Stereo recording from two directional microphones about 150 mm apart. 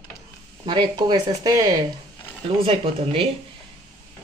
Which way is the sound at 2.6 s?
40° right (ahead or behind).